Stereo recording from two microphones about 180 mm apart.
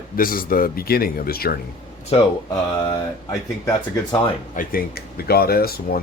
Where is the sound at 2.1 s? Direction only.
30° left (ahead or behind).